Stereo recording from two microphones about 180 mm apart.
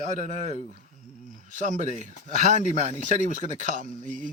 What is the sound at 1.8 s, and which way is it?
Speech, 40° left (ahead or behind).